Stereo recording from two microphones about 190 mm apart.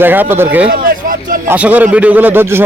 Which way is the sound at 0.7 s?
50° right (ahead or behind).